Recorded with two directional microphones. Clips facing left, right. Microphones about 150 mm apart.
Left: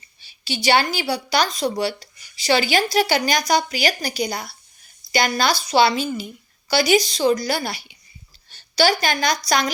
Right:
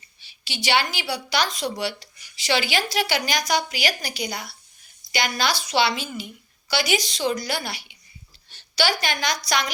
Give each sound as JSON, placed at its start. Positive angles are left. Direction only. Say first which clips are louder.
{"t": 0.2, "sound": "a woman's voice", "louder": "left 7 dB", "side_deg": 40}